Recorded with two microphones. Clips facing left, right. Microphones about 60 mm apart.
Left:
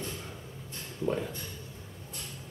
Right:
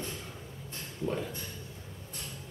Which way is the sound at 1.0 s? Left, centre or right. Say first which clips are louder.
Left 3 dB; left.